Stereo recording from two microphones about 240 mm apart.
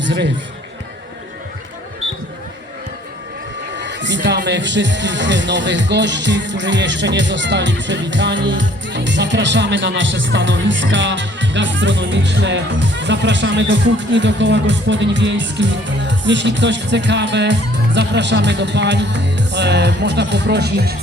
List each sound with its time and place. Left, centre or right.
3.8 s speech: right